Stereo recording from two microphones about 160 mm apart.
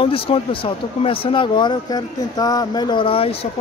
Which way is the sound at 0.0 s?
35° left (ahead or behind).